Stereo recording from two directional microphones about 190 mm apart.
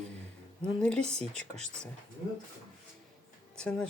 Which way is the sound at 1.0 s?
35° right (ahead or behind).